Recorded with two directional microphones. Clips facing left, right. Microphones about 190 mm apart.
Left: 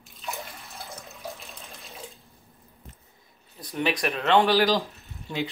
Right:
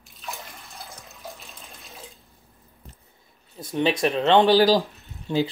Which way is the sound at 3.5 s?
25° right (ahead or behind).